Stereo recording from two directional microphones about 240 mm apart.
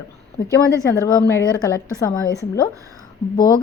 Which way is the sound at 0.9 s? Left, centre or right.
Centre.